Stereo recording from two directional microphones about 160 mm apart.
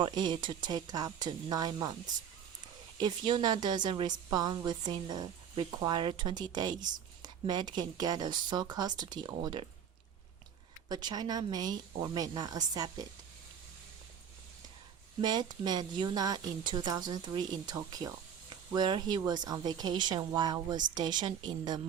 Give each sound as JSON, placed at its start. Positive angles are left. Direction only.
{"t": 0.0, "sound": "a woman's voice", "side_deg": -30}
{"t": 3.0, "sound": "a woman's voice", "side_deg": -25}
{"t": 10.8, "sound": "a woman's voice", "side_deg": -25}
{"t": 15.2, "sound": "a woman's voice", "side_deg": -25}